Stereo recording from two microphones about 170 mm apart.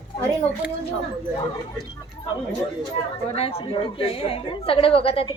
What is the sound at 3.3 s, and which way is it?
A woman's voice, 35° left (ahead or behind).